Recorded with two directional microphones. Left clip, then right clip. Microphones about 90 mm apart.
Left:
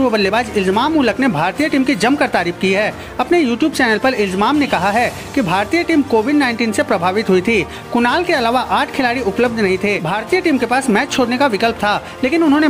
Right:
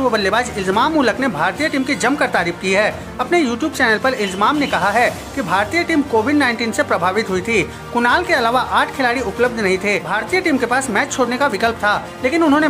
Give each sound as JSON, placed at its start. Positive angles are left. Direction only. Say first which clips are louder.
{"t": 0.0, "sound": "speech", "louder": "left 1 dB", "side_deg": 20}
{"t": 3.8, "sound": "speech", "louder": "even", "side_deg": 25}